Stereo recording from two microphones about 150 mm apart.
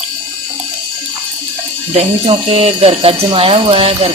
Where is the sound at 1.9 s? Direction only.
40° right (ahead or behind).